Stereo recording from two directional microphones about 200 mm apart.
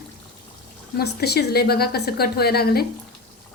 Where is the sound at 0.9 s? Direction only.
55° left (ahead or behind).